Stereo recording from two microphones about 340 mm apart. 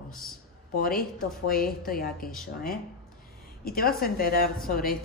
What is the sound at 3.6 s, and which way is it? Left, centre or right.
Speech, left.